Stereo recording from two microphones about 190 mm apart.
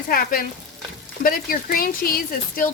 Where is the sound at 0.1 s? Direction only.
50° left (ahead or behind).